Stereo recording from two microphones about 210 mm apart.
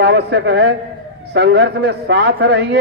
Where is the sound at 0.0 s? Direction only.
55° right (ahead or behind).